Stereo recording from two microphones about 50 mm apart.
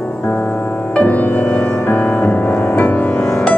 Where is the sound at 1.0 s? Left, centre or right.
Left.